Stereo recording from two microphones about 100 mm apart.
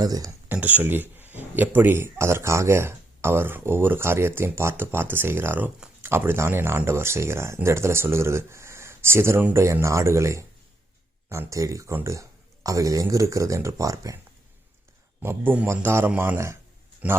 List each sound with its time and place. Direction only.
0.0 s speech: 40° right (ahead or behind)
0.4 s speech: 15° right (ahead or behind); by 14.2 s 35° right (ahead or behind)
15.2 s speech: 20° right (ahead or behind)
17.0 s a man's voice: 15° right (ahead or behind)